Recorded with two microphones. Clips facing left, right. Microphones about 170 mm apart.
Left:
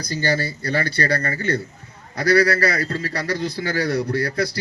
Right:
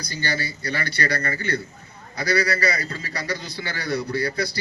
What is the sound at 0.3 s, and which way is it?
Speech, 50° left (ahead or behind).